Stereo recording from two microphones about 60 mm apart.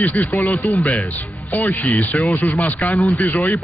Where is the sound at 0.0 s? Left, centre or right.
Left.